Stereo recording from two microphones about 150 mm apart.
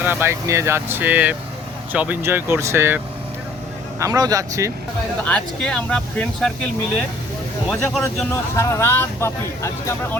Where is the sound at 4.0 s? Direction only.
20° right (ahead or behind).